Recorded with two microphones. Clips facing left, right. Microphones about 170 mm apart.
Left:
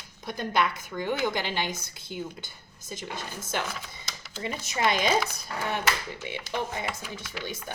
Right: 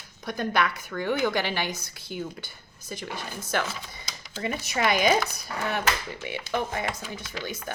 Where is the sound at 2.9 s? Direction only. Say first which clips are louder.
Right 1 dB; 25° left (ahead or behind).